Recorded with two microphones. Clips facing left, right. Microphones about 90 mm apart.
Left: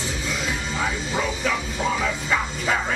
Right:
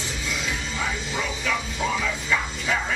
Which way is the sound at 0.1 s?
35° left (ahead or behind).